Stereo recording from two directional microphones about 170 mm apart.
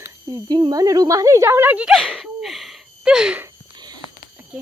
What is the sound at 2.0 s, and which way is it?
Gasp, centre (ahead or behind).